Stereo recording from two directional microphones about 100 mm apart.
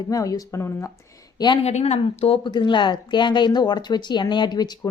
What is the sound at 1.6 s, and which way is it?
Speech, 90° left.